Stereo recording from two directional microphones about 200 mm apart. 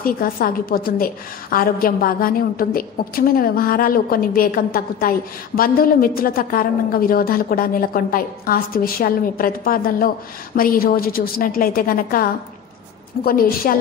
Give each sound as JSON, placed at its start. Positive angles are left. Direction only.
{"t": 0.0, "sound": "a woman's voice", "side_deg": 45}